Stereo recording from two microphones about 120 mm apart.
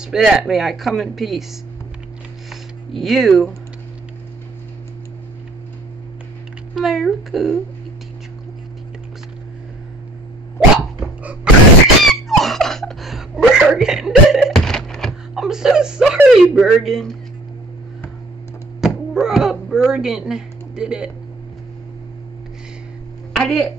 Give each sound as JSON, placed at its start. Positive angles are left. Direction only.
{"t": 0.0, "sound": "speech", "side_deg": -5}
{"t": 2.5, "sound": "speech", "side_deg": 0}
{"t": 6.7, "sound": "speech", "side_deg": 0}
{"t": 12.0, "sound": "a sound", "side_deg": 0}
{"t": 16.3, "sound": "speech", "side_deg": -5}
{"t": 18.8, "sound": "a child's voice", "side_deg": -5}
{"t": 23.3, "sound": "speech", "side_deg": 0}